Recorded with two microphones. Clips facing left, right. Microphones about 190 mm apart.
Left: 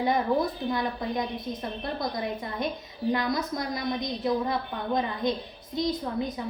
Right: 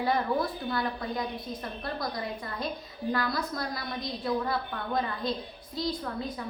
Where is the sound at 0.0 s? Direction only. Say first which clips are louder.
Left 3 dB; 20° left (ahead or behind).